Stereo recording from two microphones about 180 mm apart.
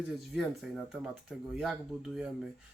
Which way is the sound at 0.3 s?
5° right (ahead or behind).